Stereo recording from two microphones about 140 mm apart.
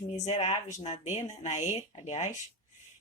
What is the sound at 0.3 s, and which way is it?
Speech, 55° left (ahead or behind).